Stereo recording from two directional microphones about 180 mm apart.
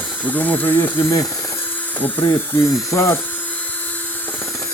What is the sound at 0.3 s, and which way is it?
Speech, 10° left (ahead or behind).